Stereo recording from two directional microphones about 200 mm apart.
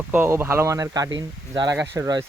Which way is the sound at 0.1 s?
10° right (ahead or behind).